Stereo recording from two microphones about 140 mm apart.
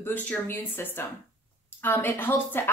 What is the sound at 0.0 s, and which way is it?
Speech, 10° left (ahead or behind).